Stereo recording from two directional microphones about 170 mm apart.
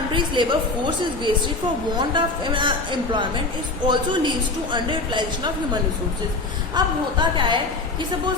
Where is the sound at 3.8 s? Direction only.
25° right (ahead or behind).